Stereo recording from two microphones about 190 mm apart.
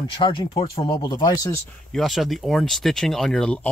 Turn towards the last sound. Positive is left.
turn(degrees=5)  # may be behind; listen again after turning